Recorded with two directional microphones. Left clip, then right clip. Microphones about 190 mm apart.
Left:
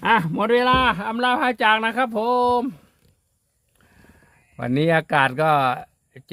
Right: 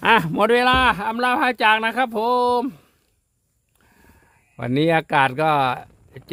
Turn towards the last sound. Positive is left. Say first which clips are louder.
# left 1 dB
turn(degrees=-20)  # may be behind; listen again after turning